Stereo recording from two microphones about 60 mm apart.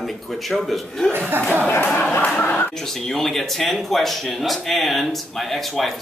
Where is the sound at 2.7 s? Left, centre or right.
Centre.